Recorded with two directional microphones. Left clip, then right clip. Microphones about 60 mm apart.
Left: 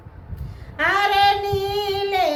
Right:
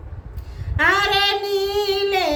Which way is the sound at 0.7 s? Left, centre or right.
Right.